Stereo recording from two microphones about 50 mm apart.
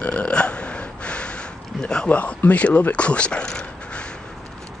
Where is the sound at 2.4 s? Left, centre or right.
Left.